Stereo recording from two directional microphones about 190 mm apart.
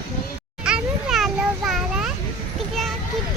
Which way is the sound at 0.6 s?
5° right (ahead or behind).